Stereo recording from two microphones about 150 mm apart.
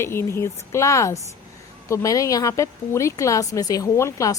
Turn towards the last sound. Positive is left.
turn(degrees=20)  # may be behind; listen again after turning